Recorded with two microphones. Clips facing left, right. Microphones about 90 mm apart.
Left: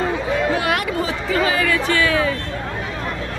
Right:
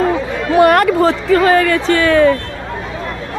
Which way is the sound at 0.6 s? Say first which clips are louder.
Right 11 dB; 55° right (ahead or behind).